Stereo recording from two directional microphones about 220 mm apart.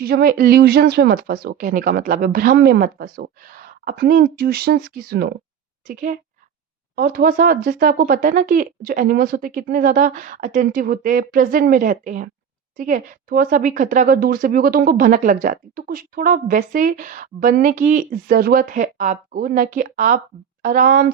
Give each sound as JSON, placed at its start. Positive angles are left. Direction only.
{"t": 0.0, "sound": "speech", "side_deg": -45}